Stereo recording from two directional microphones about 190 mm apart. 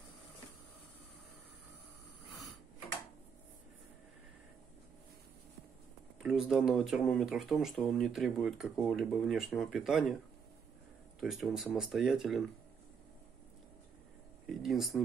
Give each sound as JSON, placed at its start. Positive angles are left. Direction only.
{"t": 6.2, "sound": "speech", "side_deg": -5}
{"t": 11.1, "sound": "speech", "side_deg": 0}
{"t": 14.5, "sound": "speech", "side_deg": 0}